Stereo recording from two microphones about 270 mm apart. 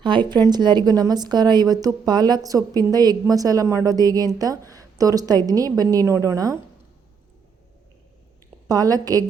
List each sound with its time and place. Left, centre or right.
0.0 s a woman's voice: centre
8.6 s a woman's voice: centre